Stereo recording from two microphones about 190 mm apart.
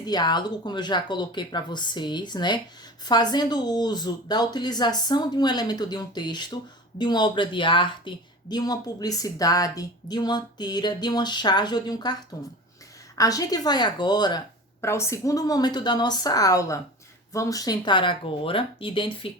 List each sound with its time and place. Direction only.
0.0 s a woman's voice: 20° left (ahead or behind)